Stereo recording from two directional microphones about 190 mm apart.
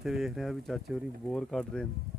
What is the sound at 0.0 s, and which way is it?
Speech, centre (ahead or behind).